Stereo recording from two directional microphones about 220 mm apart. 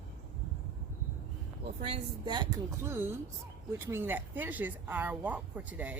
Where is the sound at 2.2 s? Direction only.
20° right (ahead or behind).